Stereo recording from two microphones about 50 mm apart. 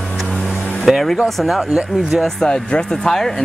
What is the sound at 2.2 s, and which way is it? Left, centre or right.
Speech, centre.